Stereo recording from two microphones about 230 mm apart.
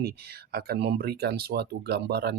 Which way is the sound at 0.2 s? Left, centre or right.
Right.